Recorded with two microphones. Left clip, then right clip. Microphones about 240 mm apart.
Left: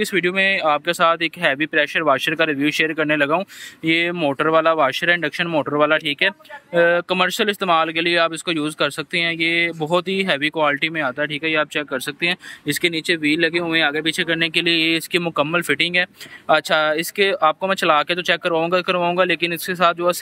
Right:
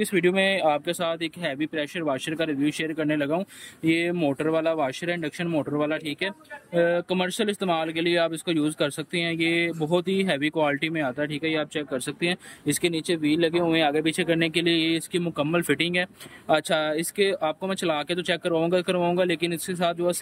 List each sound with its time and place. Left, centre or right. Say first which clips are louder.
0.0 s speech: left 4 dB; centre